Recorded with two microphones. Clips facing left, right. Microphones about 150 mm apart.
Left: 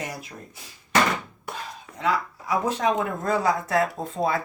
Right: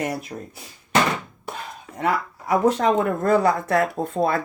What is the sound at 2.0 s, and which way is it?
Speech, 55° right (ahead or behind).